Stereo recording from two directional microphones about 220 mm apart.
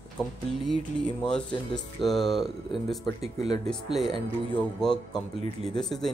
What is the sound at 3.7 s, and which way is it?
Speech, centre (ahead or behind).